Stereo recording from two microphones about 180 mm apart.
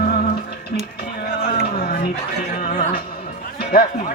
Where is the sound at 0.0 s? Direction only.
60° left (ahead or behind).